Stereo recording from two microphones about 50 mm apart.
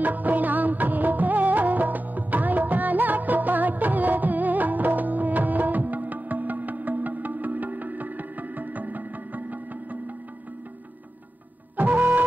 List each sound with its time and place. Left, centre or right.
0.0 s music: right
11.7 s music: right